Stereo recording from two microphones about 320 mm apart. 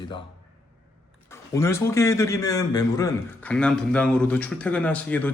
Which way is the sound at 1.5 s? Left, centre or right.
Centre.